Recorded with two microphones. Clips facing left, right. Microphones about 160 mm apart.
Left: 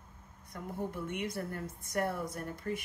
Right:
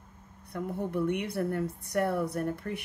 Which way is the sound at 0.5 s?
60° right (ahead or behind).